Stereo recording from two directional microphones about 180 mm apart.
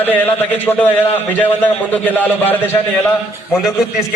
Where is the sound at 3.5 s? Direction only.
Centre (ahead or behind).